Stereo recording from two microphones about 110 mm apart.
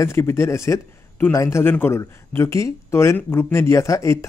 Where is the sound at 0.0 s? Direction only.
25° left (ahead or behind).